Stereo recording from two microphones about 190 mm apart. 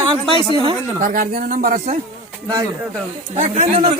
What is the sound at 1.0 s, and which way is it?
Speech, 45° right (ahead or behind).